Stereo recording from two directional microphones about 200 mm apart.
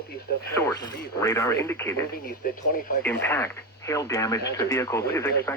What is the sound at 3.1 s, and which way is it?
Speech, 10° left (ahead or behind).